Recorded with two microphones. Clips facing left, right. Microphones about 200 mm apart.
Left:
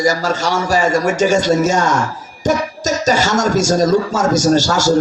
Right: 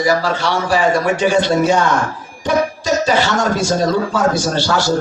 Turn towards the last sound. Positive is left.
turn(degrees=45)  # may be behind; listen again after turning